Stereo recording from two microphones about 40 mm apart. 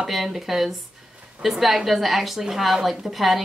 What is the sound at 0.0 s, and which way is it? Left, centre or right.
A woman's voice, centre.